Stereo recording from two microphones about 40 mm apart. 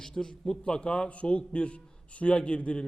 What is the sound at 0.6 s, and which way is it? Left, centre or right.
A man's voice, left.